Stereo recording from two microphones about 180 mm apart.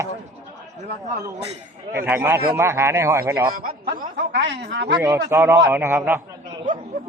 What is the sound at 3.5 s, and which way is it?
A man's voice, 55° right (ahead or behind).